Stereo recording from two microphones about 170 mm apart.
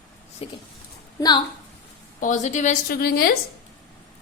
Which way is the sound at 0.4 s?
35° left (ahead or behind).